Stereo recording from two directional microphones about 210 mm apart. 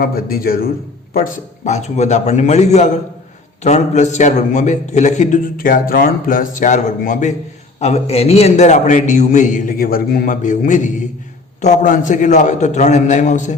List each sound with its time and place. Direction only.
0.0 s a man's voice: 45° left (ahead or behind)